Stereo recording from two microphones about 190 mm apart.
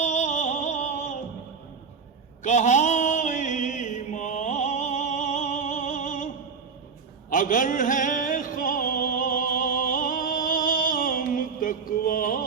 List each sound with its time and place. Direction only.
0.0 s music: 40° left (ahead or behind)
2.4 s mantra: 40° left (ahead or behind)
7.3 s music: 45° left (ahead or behind)